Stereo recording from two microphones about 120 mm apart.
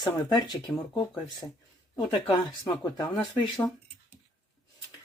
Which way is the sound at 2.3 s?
35° left (ahead or behind).